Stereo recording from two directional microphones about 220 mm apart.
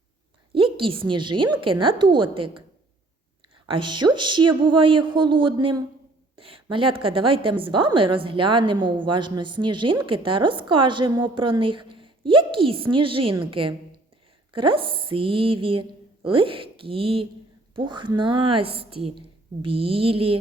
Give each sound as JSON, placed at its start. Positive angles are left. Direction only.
{"t": 0.5, "sound": "a woman's voice", "side_deg": -25}
{"t": 3.7, "sound": "a woman's voice", "side_deg": -20}